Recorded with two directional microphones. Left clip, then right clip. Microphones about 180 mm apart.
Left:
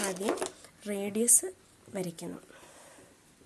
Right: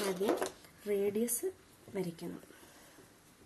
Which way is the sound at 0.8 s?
55° left (ahead or behind).